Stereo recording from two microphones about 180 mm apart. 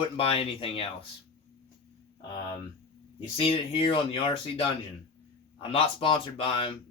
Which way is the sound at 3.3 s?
30° left (ahead or behind).